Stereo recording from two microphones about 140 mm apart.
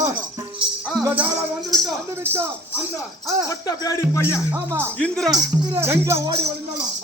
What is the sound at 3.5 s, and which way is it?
Speech, 30° left (ahead or behind).